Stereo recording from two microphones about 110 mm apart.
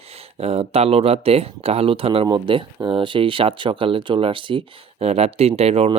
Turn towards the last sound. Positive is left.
turn(degrees=-65)  # may be behind; listen again after turning